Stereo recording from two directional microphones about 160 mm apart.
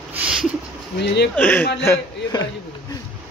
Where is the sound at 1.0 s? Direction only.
90° left.